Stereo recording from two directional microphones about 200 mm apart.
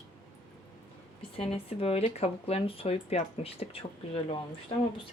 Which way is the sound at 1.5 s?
30° left (ahead or behind).